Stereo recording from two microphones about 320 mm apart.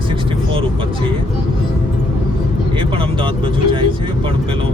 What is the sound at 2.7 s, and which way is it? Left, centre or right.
Speech, centre.